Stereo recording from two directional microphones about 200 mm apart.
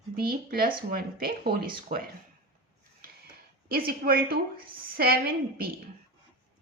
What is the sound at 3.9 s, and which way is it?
Speech, 50° right (ahead or behind).